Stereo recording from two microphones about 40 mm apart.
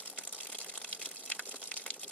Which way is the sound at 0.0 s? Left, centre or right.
Left.